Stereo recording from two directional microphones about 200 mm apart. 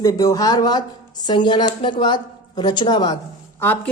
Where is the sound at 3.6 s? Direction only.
10° left (ahead or behind).